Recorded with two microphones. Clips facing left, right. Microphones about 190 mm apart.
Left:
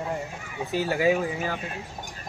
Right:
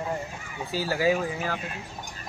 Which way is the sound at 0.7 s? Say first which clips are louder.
Left 2 dB; 20° left (ahead or behind).